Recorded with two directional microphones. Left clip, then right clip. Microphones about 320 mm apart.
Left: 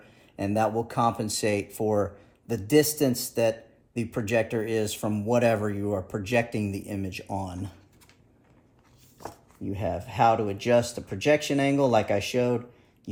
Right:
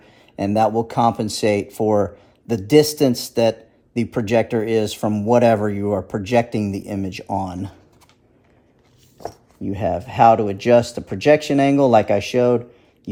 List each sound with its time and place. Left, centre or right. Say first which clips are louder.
0.3 s speech: right 8 dB; right
9.6 s speech: right 9 dB; right